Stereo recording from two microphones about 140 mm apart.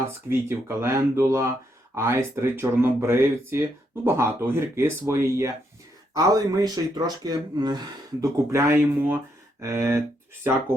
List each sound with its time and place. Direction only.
0.0 s speech: 20° right (ahead or behind)